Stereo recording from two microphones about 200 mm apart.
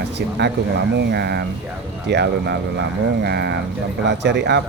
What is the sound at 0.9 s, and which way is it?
Speech, 55° right (ahead or behind).